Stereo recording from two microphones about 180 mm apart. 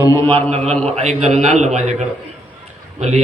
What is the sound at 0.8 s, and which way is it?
A man's voice, 35° right (ahead or behind).